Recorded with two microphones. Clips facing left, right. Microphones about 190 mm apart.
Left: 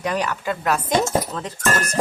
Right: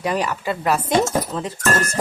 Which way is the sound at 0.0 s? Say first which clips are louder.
Right 1 dB; 5° right (ahead or behind).